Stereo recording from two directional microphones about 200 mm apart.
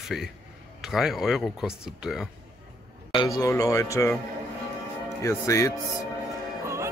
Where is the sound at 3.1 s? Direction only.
20° left (ahead or behind).